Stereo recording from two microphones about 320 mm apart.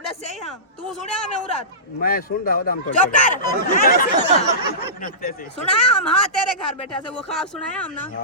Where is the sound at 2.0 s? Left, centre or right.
Left.